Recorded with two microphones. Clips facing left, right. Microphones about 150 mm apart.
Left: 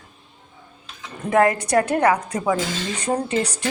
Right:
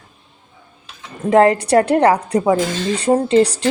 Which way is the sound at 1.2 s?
30° right (ahead or behind).